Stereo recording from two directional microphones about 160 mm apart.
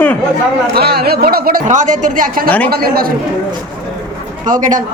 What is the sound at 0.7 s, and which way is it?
Speech, 75° right (ahead or behind).